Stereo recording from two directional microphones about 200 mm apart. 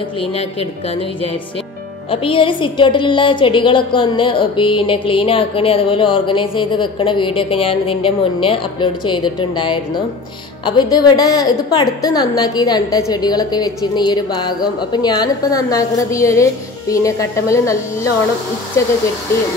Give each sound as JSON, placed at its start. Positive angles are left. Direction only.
{"t": 0.2, "sound": "a woman's voice", "side_deg": 30}